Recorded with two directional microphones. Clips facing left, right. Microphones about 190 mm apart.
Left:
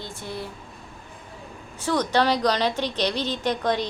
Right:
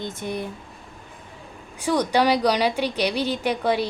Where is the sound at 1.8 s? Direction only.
10° right (ahead or behind).